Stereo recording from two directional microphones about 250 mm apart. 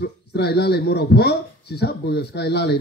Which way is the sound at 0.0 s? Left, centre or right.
Left.